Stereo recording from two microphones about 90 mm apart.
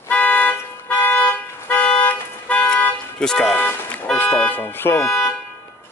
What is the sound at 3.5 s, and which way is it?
Music, 20° left (ahead or behind).